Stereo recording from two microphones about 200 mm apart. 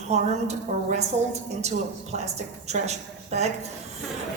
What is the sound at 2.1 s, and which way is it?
A woman's voice, 35° right (ahead or behind).